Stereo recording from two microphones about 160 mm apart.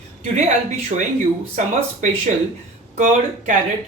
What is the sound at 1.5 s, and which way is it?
Speech, 50° right (ahead or behind).